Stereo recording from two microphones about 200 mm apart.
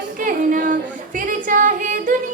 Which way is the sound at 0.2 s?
40° right (ahead or behind).